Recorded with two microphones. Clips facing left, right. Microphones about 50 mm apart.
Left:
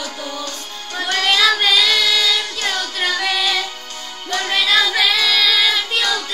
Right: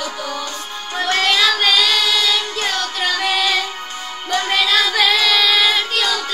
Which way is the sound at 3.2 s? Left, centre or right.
Right.